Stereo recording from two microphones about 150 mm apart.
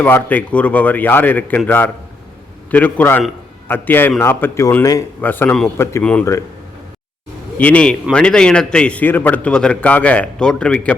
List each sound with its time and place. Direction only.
0.0 s a man's voice: 10° left (ahead or behind)
5.2 s a man's voice: 10° left (ahead or behind)
7.6 s a man's voice: 10° left (ahead or behind)